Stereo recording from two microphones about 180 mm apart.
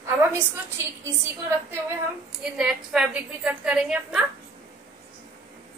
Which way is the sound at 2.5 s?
5° right (ahead or behind).